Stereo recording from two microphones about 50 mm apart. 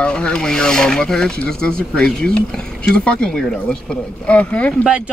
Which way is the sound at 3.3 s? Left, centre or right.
Centre.